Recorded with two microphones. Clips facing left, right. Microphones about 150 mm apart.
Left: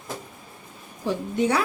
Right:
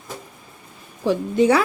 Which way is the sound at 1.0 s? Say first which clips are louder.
Right 6 dB; 90° right.